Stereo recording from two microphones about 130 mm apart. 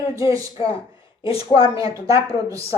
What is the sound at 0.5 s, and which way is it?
A woman's voice, 45° left (ahead or behind).